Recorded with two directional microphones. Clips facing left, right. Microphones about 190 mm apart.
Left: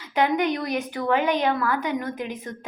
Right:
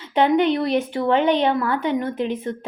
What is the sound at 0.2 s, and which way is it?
Speech, 30° right (ahead or behind).